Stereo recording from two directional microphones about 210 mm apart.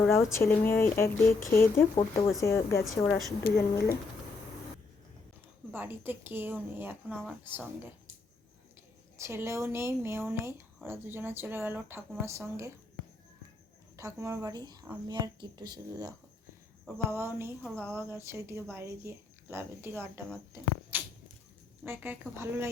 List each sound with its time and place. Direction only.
0.0 s a woman's voice: 10° left (ahead or behind)
3.4 s speech: 50° left (ahead or behind)
5.7 s a woman's voice: 10° right (ahead or behind)
7.1 s a woman's voice: 5° left (ahead or behind)
9.1 s a woman's voice: 10° right (ahead or behind)
13.9 s a woman's voice: 15° right (ahead or behind)